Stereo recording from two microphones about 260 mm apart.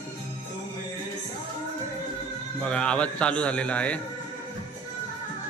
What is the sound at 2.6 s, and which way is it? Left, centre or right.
Speech, centre.